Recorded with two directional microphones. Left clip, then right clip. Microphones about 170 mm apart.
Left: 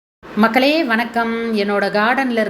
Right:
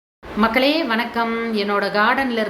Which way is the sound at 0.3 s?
25° left (ahead or behind).